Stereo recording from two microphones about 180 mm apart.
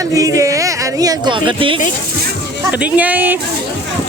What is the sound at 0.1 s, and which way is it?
Speech, 20° right (ahead or behind).